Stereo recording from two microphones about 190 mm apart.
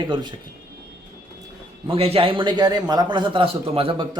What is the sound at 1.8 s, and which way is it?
A man's voice, 30° right (ahead or behind).